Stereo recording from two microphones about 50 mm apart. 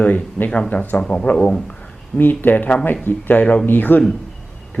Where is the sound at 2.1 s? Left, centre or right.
Left.